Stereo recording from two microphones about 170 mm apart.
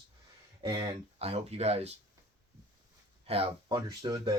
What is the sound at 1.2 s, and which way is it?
Speech, 40° right (ahead or behind).